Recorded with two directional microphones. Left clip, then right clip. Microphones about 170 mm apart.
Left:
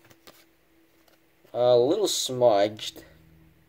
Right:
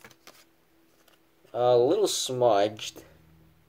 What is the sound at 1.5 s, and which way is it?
Speech, 10° left (ahead or behind).